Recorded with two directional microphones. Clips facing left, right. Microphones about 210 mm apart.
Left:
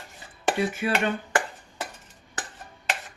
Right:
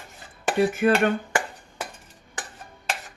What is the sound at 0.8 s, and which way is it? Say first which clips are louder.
Speech: right 9 dB; 55° right (ahead or behind).